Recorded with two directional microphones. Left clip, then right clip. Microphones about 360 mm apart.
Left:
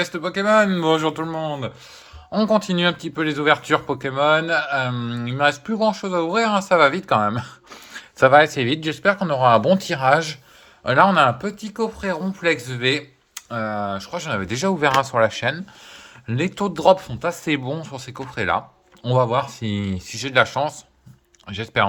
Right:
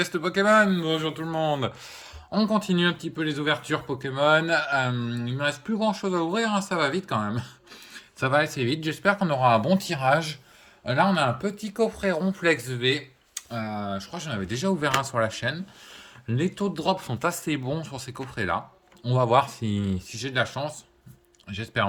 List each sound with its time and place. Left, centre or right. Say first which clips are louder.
0.0 s a man's voice: left 2 dB; centre
17.1 s a man's voice: left 4 dB; centre